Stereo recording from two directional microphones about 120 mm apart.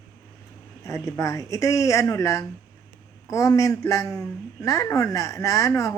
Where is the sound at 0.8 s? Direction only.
25° left (ahead or behind).